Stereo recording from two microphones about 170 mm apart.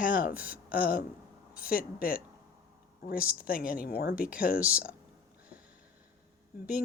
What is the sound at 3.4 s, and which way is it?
Speech, 60° left (ahead or behind).